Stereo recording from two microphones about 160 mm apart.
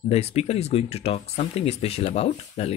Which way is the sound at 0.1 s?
40° left (ahead or behind).